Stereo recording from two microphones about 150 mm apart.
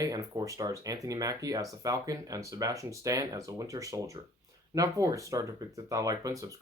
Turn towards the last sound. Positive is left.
turn(degrees=-25)  # may be behind; listen again after turning